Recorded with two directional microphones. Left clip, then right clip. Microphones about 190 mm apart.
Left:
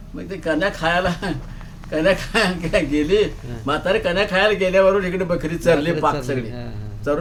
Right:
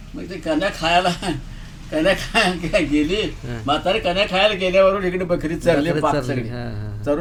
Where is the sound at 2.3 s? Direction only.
10° left (ahead or behind).